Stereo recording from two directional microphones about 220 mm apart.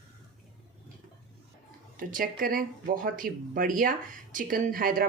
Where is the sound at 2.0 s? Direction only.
40° right (ahead or behind).